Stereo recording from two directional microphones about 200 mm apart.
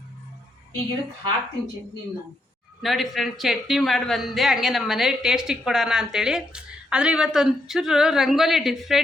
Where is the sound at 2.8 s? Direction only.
Centre (ahead or behind).